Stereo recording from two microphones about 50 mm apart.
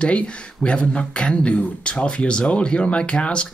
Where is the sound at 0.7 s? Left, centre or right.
Left.